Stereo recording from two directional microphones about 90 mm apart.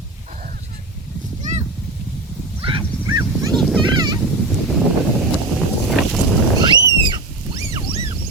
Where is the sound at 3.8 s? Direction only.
50° right (ahead or behind).